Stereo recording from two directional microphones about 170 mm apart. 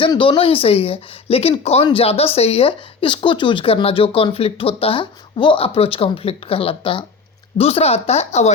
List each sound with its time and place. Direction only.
0.0 s speech: 30° left (ahead or behind)